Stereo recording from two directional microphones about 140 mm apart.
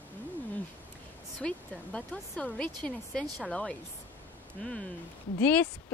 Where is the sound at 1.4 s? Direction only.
5° left (ahead or behind).